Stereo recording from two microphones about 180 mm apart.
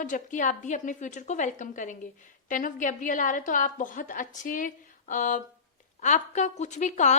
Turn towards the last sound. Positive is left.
turn(degrees=40)  # may be behind; listen again after turning